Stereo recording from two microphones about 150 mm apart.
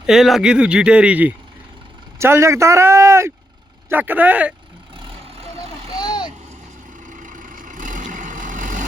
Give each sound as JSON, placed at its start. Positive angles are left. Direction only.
{"t": 0.0, "sound": "speech", "side_deg": 0}
{"t": 5.5, "sound": "vehicle", "side_deg": 25}
{"t": 7.2, "sound": "vehicle", "side_deg": -60}